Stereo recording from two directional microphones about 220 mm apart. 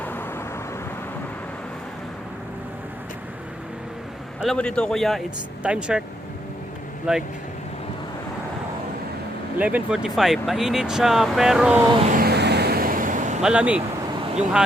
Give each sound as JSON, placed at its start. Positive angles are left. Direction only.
{"t": 0.0, "sound": "vehicle", "side_deg": 10}
{"t": 4.4, "sound": "speech", "side_deg": 0}
{"t": 7.1, "sound": "speech", "side_deg": -5}
{"t": 9.6, "sound": "speech", "side_deg": -5}
{"t": 12.0, "sound": "vehicle", "side_deg": -40}
{"t": 13.4, "sound": "speech", "side_deg": -5}